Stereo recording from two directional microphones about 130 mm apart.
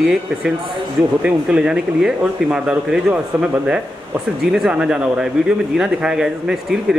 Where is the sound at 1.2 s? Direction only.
5° right (ahead or behind).